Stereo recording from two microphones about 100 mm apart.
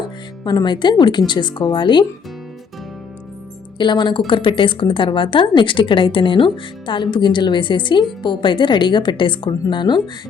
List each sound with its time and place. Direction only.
0.4 s speech: 45° left (ahead or behind)
3.8 s a woman's voice: 50° left (ahead or behind)